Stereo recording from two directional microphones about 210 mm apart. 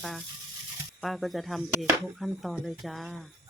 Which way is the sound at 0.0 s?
Centre (ahead or behind).